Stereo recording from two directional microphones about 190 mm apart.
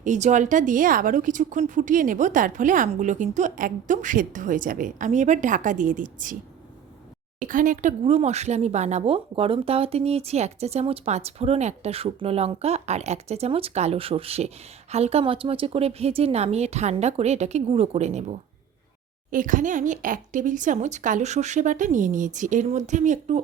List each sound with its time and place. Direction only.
0.0 s speech: 40° right (ahead or behind)
7.3 s speech: 45° right (ahead or behind)